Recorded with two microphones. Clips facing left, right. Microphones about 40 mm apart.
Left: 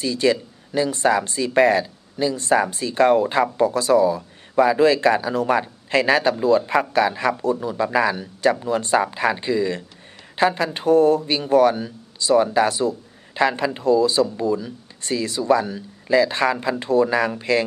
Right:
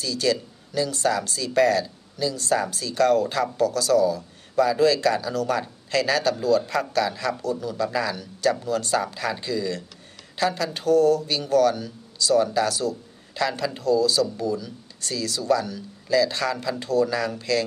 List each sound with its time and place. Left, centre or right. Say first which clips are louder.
0.0 s speech: left 4 dB; left